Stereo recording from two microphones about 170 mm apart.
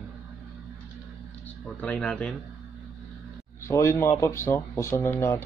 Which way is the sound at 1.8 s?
5° left (ahead or behind).